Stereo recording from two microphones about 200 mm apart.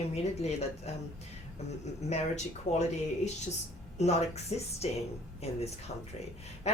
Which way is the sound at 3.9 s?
30° left (ahead or behind).